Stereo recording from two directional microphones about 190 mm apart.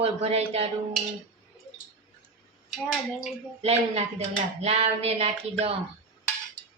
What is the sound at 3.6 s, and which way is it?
Speech, 30° right (ahead or behind).